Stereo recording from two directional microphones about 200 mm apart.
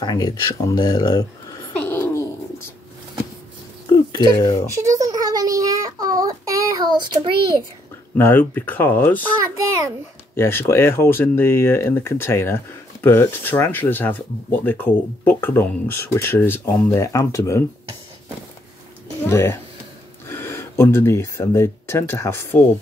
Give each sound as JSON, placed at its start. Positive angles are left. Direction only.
{"t": 0.0, "sound": "speech", "side_deg": 20}
{"t": 1.8, "sound": "a sound", "side_deg": 10}
{"t": 4.4, "sound": "speech", "side_deg": 20}
{"t": 4.6, "sound": "child singing", "side_deg": -15}
{"t": 8.2, "sound": "speech", "side_deg": 10}
{"t": 10.3, "sound": "speech", "side_deg": 10}
{"t": 19.2, "sound": "speech", "side_deg": 10}